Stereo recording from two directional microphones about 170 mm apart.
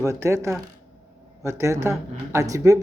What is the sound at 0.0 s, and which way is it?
Speech, 15° right (ahead or behind).